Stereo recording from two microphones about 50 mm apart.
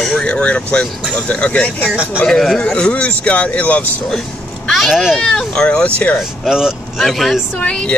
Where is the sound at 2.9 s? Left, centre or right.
Left.